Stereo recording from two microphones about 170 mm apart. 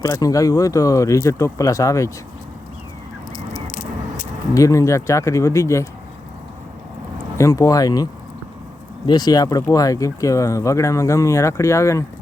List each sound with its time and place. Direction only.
0.0 s speech: 20° left (ahead or behind)
3.7 s a sound: 50° left (ahead or behind)
4.5 s speech: 20° left (ahead or behind)
7.3 s speech: 20° left (ahead or behind)
9.0 s speech: 25° left (ahead or behind)